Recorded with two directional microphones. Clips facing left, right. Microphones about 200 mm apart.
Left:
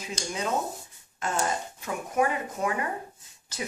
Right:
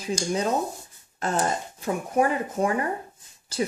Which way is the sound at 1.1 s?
35° right (ahead or behind).